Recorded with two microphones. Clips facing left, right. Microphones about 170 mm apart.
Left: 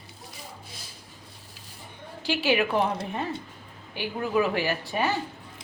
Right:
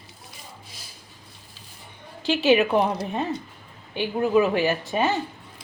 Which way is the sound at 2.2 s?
20° right (ahead or behind).